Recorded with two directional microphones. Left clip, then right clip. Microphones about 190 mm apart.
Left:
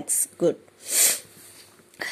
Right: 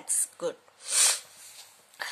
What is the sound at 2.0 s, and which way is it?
Throat clearing, 15° left (ahead or behind).